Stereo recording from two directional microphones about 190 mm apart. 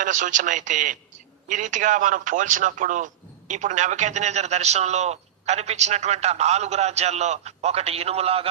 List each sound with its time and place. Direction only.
0.0 s a man's voice: 40° right (ahead or behind)